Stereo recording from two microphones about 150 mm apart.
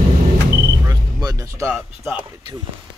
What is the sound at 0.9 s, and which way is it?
Music, 25° right (ahead or behind).